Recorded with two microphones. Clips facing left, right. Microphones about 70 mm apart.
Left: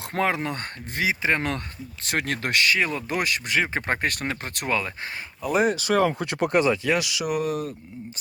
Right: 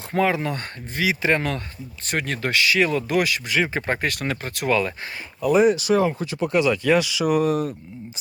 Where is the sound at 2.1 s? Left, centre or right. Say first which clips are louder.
Right 1 dB; left.